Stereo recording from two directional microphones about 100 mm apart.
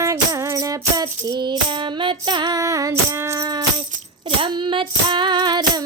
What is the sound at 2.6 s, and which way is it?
Music, 35° right (ahead or behind).